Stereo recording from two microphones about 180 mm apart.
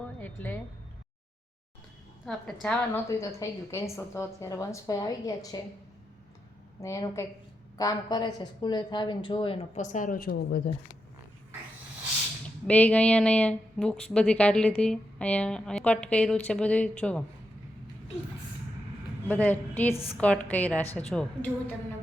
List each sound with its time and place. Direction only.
0.2 s a woman's voice: 10° left (ahead or behind)
2.2 s a woman's voice: 5° left (ahead or behind)
3.1 s a woman's voice: 15° left (ahead or behind)
6.8 s a woman's voice: 20° left (ahead or behind)
9.7 s a woman's voice: 40° left (ahead or behind)
12.6 s a woman's voice: 10° left (ahead or behind)
19.3 s a woman's voice: 10° left (ahead or behind)